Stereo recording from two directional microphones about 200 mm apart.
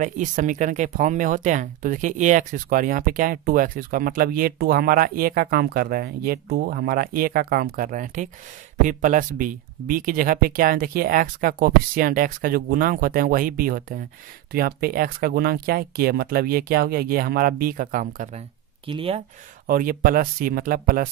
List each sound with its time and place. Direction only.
0.0 s speech: 40° right (ahead or behind)
18.9 s speech: 25° right (ahead or behind)
19.6 s speech: 45° right (ahead or behind)